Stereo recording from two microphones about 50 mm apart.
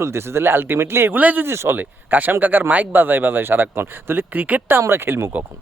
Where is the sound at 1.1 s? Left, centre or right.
Right.